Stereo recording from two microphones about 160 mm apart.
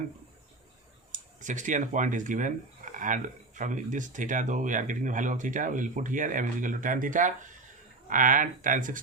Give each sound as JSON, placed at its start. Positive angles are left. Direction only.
{"t": 1.1, "sound": "speech", "side_deg": -50}